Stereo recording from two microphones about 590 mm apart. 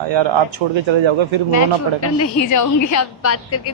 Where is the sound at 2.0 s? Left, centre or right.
Left.